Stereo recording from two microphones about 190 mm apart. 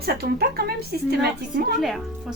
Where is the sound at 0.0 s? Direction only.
55° right (ahead or behind).